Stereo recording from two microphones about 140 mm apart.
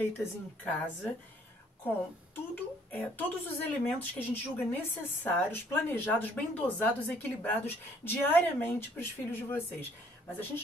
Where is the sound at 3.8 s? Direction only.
15° left (ahead or behind).